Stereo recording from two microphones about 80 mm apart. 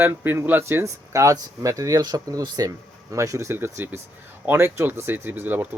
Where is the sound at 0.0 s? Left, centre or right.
Right.